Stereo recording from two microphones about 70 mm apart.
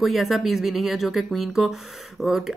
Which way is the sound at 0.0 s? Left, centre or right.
Centre.